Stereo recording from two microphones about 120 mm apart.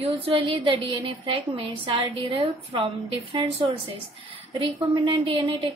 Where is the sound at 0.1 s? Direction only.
50° right (ahead or behind).